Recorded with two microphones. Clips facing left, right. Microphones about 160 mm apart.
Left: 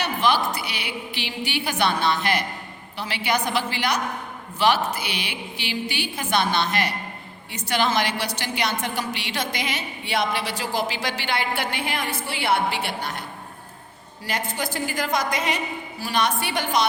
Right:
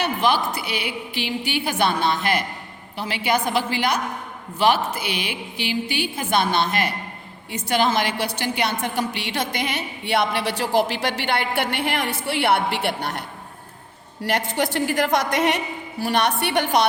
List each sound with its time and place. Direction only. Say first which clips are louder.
0.0 s a woman's voice: right 1 dB; 50° right (ahead or behind); by 13.2 s 65° right (ahead or behind)
14.3 s a woman's voice: right 5 dB; 70° right (ahead or behind)